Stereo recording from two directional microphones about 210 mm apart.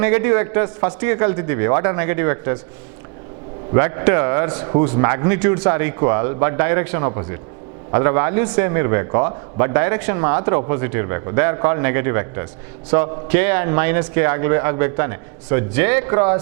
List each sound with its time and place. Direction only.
0.0 s a man's voice: 15° right (ahead or behind)
3.7 s a man's voice: 15° right (ahead or behind)